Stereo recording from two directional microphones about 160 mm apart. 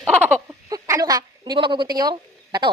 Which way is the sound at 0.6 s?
25° right (ahead or behind).